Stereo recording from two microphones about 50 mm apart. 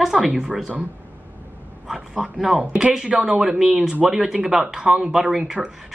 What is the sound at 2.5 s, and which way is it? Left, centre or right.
Speech, centre.